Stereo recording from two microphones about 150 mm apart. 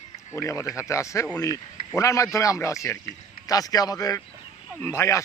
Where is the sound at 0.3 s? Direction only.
20° left (ahead or behind).